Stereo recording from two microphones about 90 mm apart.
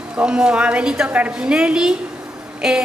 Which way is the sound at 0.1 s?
10° right (ahead or behind).